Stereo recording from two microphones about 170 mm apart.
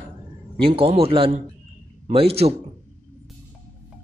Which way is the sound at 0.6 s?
30° right (ahead or behind).